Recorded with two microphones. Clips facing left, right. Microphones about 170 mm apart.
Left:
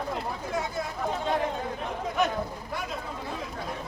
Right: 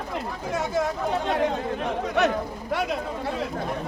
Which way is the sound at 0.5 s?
90° right.